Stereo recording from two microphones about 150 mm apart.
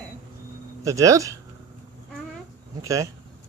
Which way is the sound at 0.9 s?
20° right (ahead or behind).